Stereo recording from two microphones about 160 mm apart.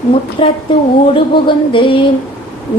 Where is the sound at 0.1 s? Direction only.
30° left (ahead or behind).